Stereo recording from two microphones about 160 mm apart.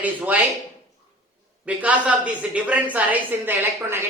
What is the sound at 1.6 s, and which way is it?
A man's voice, 10° right (ahead or behind).